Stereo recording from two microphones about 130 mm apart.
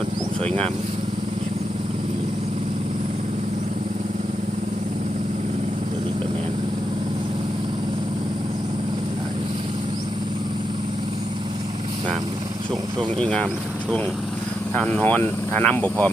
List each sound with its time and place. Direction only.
0.4 s speech: 10° left (ahead or behind)
13.0 s speech: 5° left (ahead or behind)
14.8 s speech: 10° left (ahead or behind)